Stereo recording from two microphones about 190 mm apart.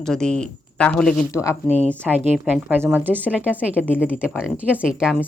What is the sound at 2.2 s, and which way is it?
A woman's voice, 5° right (ahead or behind).